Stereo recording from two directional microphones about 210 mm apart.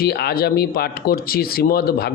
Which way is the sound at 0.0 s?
50° left (ahead or behind).